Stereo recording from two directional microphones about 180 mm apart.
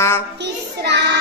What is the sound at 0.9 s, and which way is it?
Child singing, 70° right (ahead or behind).